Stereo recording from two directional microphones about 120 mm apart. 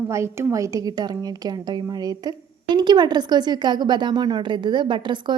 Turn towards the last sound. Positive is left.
turn(degrees=-40)  # may be behind; listen again after turning